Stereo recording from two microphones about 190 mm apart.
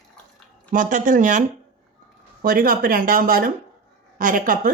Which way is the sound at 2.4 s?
45° right (ahead or behind).